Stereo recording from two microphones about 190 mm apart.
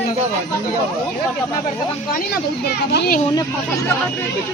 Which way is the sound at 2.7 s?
60° left (ahead or behind).